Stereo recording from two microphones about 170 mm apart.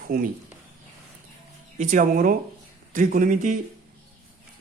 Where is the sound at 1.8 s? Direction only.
50° right (ahead or behind).